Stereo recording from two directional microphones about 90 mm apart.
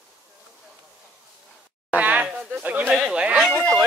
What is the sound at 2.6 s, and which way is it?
Speech, 15° right (ahead or behind).